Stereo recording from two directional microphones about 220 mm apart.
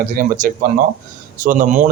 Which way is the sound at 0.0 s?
40° right (ahead or behind).